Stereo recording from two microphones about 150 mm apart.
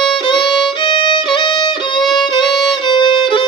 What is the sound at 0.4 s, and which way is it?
Violin, 30° left (ahead or behind).